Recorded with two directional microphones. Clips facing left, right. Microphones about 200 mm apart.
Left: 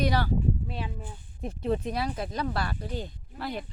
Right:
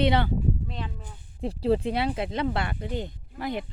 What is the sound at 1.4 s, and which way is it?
Speech, 30° right (ahead or behind).